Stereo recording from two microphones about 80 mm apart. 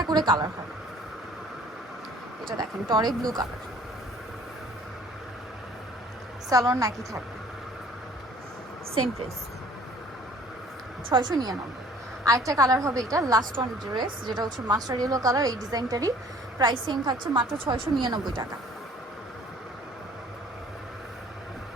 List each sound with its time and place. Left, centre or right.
0.0 s speech: right
2.6 s speech: right
6.5 s a woman's voice: right
11.1 s speech: right
12.2 s a woman's voice: right
13.6 s a woman's voice: right
16.6 s a woman's voice: right
18.0 s speech: right